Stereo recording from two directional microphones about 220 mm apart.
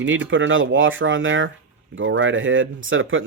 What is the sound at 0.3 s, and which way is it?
Speech, 60° right (ahead or behind).